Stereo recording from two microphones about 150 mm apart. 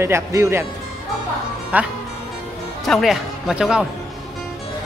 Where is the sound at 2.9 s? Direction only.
Centre (ahead or behind).